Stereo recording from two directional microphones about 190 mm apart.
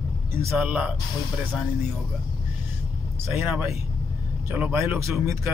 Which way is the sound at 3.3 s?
15° right (ahead or behind).